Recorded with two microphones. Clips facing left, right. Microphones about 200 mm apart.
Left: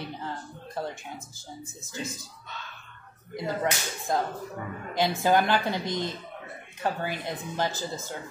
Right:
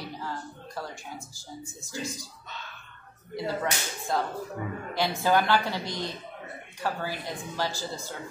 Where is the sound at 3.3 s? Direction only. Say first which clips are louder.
Left 1 dB; 15° left (ahead or behind).